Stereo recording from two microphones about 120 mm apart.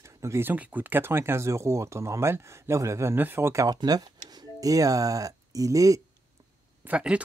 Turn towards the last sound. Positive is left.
turn(degrees=-10)  # may be behind; listen again after turning